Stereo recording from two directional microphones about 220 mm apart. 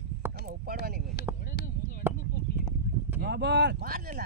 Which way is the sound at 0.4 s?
40° right (ahead or behind).